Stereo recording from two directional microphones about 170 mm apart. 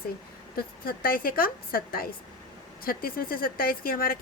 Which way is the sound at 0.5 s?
60° left (ahead or behind).